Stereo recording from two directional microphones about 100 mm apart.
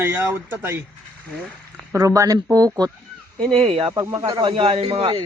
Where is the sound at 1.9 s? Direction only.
35° right (ahead or behind).